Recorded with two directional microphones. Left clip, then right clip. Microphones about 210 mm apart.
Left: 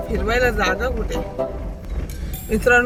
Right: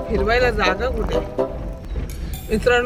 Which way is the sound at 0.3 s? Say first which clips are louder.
Even; 10° left (ahead or behind).